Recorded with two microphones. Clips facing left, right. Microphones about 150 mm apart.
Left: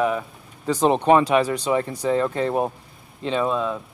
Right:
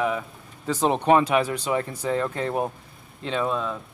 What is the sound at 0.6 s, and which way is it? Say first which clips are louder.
Speech: left 4 dB; 15° left (ahead or behind).